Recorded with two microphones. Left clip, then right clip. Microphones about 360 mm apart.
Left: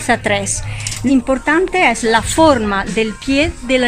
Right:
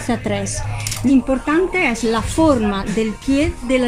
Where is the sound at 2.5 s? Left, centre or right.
Left.